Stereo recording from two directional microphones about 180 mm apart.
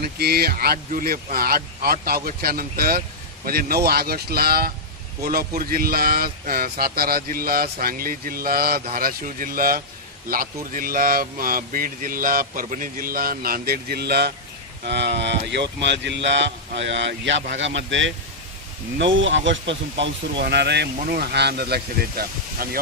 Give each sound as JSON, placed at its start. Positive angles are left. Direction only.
{"t": 0.0, "sound": "a man's voice", "side_deg": -60}